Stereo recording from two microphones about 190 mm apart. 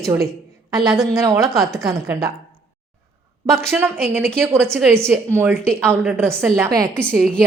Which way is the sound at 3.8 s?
10° right (ahead or behind).